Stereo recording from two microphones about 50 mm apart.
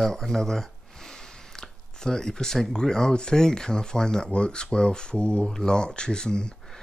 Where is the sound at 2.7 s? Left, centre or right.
Centre.